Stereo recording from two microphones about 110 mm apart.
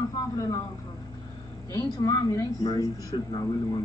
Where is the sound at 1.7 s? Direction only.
35° left (ahead or behind).